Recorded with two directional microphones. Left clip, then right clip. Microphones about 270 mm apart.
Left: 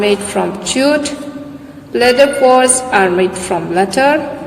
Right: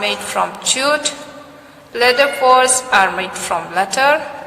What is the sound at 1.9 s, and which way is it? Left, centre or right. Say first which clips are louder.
A woman's voice: left 4 dB; centre.